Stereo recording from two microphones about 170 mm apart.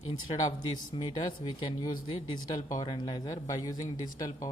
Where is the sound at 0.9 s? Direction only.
30° left (ahead or behind).